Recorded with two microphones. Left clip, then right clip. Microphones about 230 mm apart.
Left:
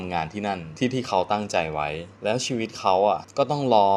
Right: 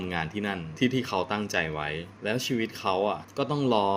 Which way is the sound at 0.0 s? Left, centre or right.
Centre.